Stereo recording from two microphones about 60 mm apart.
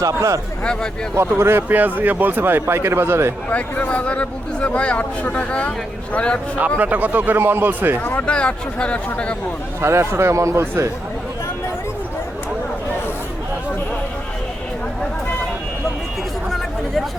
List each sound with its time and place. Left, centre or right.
0.0 s speech: right
0.6 s speech: centre
1.1 s speech: right
3.5 s speech: left
6.7 s speech: right
8.3 s speech: centre
9.8 s speech: right
16.5 s chatter: centre